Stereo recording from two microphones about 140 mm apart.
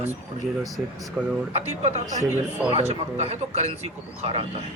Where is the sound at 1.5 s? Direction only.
50° right (ahead or behind).